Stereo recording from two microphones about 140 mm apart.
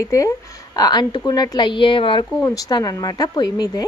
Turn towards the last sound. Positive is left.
turn(degrees=30)  # may be behind; listen again after turning